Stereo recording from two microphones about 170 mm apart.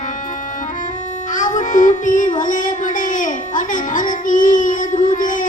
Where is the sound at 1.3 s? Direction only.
50° left (ahead or behind).